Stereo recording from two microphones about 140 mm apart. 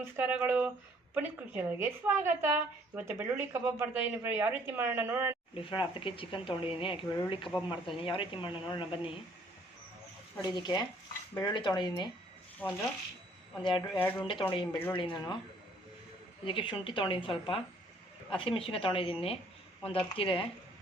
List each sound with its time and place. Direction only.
0.0 s a woman's voice: 15° right (ahead or behind)
5.5 s speech: 40° left (ahead or behind)
10.4 s speech: 30° left (ahead or behind)
12.6 s speech: 15° left (ahead or behind)
13.6 s speech: 35° left (ahead or behind)
16.5 s speech: 35° left (ahead or behind)